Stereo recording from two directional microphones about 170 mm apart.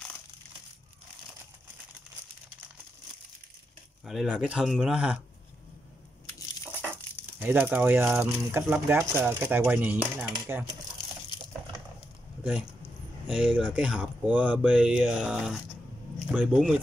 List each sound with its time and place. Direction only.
4.0 s speech: centre (ahead or behind)
6.3 s crushing: 15° left (ahead or behind)
7.3 s speech: 10° right (ahead or behind)
10.3 s speech: 25° right (ahead or behind)
13.3 s speech: 10° right (ahead or behind)